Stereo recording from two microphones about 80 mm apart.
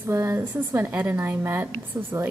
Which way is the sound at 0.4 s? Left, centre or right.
Right.